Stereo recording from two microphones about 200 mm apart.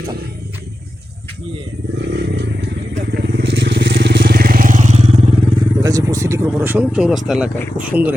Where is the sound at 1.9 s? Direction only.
60° right (ahead or behind); by 5.4 s 30° right (ahead or behind).